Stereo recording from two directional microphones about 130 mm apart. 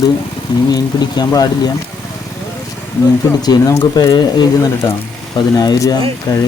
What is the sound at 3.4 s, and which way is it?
Speech, 30° left (ahead or behind).